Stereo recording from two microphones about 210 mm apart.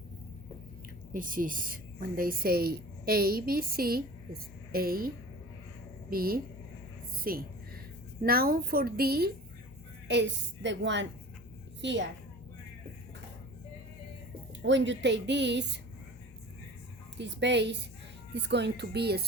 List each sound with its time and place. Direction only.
1.1 s a woman's voice: 40° right (ahead or behind); by 12.0 s 60° right (ahead or behind)
14.6 s a woman's voice: 60° right (ahead or behind)
17.2 s a woman's voice: 55° right (ahead or behind)